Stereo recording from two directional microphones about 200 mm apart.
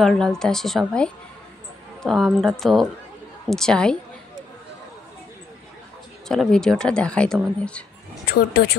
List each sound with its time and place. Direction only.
0.0 s a woman's voice: 5° left (ahead or behind)
6.2 s a woman's voice: centre (ahead or behind)
8.3 s speech: 50° left (ahead or behind)